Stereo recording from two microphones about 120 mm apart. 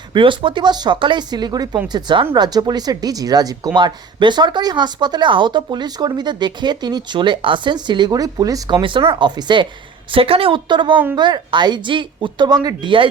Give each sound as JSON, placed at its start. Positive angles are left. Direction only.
{"t": 0.1, "sound": "speech", "side_deg": -45}
{"t": 8.8, "sound": "speech", "side_deg": -45}
{"t": 10.1, "sound": "a woman's voice", "side_deg": -50}